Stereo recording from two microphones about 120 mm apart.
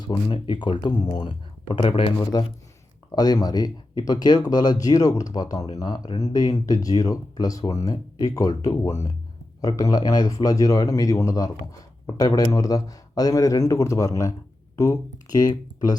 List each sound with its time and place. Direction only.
0.0 s speech: 40° left (ahead or behind)
2.3 s speech: 35° left (ahead or behind)